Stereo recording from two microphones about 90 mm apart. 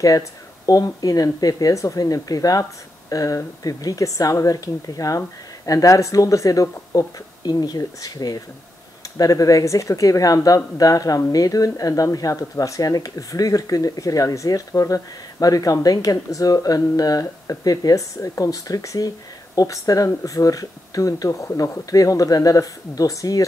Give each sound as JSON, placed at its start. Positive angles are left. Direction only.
{"t": 0.0, "sound": "speech", "side_deg": 40}